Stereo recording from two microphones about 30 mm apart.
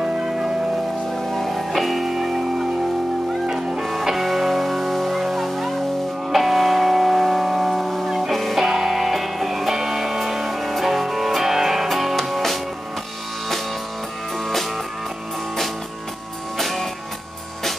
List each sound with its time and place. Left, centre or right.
0.0 s music: centre
1.1 s music: centre
3.8 s music: centre
8.3 s music: centre
8.5 s music: centre
16.5 s music: centre